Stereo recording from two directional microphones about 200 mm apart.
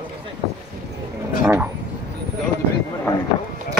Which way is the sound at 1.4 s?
10° right (ahead or behind).